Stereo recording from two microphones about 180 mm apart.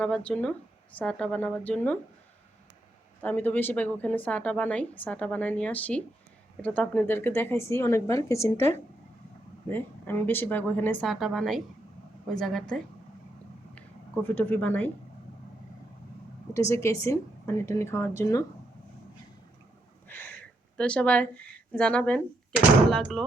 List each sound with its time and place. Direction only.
0.0 s a woman's voice: 5° left (ahead or behind)
3.2 s speech: 10° left (ahead or behind)
9.6 s a woman's voice: 10° left (ahead or behind)
14.3 s speech: 10° left (ahead or behind)
16.6 s speech: 15° left (ahead or behind)
20.1 s a sound: 10° left (ahead or behind)
21.7 s a woman's voice: 5° left (ahead or behind)